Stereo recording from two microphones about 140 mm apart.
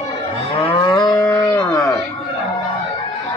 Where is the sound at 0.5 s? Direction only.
40° left (ahead or behind).